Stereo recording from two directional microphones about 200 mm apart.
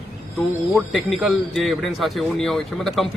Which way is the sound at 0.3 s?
Centre (ahead or behind).